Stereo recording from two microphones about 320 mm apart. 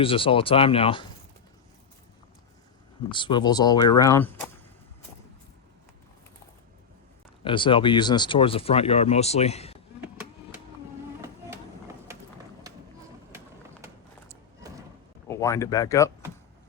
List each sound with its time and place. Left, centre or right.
0.0 s speech: centre
3.1 s speech: centre
7.4 s speech: centre
15.3 s speech: centre